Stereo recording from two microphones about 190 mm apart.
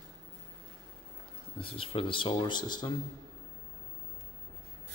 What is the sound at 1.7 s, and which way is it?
Speech, 30° left (ahead or behind).